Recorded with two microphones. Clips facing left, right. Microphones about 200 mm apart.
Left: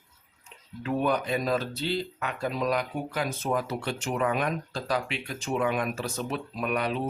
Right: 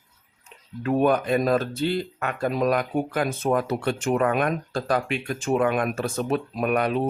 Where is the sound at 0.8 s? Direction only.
50° right (ahead or behind).